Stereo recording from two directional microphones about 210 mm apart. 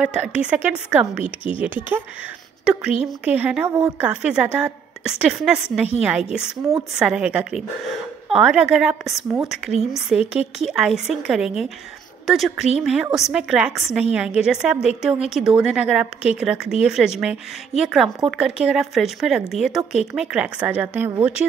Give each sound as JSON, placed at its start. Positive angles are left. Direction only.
{"t": 0.0, "sound": "a woman's voice", "side_deg": -5}
{"t": 1.2, "sound": "a woman's voice", "side_deg": 25}
{"t": 1.6, "sound": "a woman's voice", "side_deg": -10}